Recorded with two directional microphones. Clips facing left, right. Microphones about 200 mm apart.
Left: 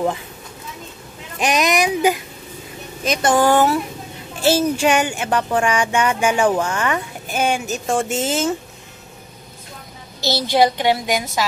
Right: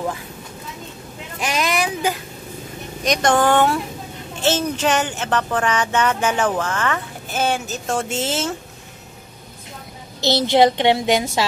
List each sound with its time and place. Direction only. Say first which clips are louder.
1.4 s speech: left 4 dB; 20° left (ahead or behind)
3.0 s speech: left 1 dB; 5° left (ahead or behind)
10.2 s a woman's voice: right 2 dB; 20° right (ahead or behind)